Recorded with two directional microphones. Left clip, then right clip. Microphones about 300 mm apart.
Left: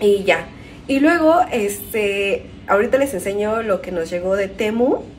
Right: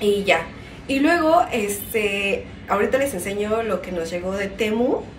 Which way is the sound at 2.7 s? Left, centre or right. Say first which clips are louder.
Left 3 dB; centre.